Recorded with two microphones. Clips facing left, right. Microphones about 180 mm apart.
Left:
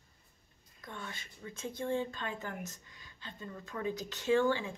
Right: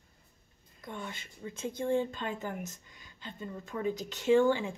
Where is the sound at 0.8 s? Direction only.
20° right (ahead or behind).